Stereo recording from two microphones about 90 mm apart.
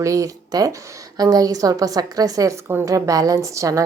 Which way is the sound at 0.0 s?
35° right (ahead or behind).